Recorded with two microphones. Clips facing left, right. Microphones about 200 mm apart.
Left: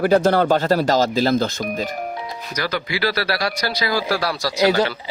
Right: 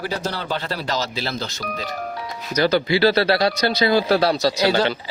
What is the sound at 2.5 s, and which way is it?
Speech, 25° right (ahead or behind).